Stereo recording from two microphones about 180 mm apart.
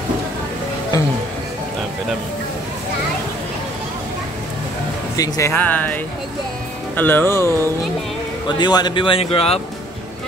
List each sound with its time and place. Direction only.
5.1 s speech: 15° left (ahead or behind)
7.0 s speech: 10° left (ahead or behind)
8.5 s a man's voice: 25° left (ahead or behind)